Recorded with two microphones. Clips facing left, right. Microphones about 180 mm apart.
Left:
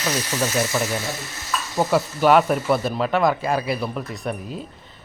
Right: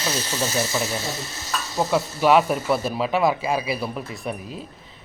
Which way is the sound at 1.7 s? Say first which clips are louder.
Left 2 dB; centre (ahead or behind).